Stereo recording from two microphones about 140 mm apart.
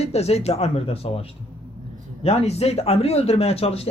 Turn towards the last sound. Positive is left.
turn(degrees=45)  # may be behind; listen again after turning